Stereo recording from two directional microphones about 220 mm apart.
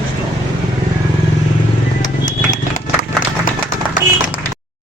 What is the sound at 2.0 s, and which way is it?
Horse, 60° left (ahead or behind).